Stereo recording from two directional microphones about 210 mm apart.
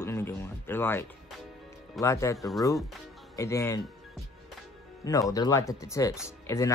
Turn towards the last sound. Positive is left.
turn(degrees=15)  # may be behind; listen again after turning